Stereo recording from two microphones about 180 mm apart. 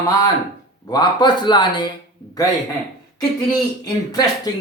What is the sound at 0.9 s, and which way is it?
Speech, 25° left (ahead or behind).